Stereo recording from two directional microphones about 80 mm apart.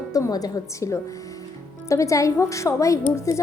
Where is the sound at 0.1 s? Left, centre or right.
Left.